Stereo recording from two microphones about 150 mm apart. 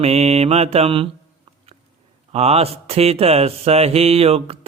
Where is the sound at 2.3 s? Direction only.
45° right (ahead or behind).